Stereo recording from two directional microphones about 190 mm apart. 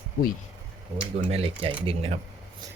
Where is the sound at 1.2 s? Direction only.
30° right (ahead or behind).